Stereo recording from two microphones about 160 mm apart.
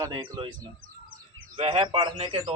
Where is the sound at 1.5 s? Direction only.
35° right (ahead or behind).